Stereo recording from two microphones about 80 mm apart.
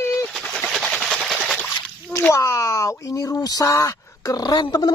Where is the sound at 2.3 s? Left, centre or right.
Left.